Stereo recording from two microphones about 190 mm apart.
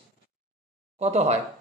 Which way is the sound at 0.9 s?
35° right (ahead or behind).